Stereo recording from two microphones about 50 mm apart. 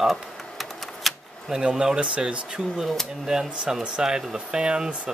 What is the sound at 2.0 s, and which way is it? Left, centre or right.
Speech, right.